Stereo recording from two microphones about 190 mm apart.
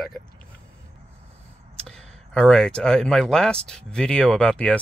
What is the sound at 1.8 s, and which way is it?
Speech, 5° left (ahead or behind).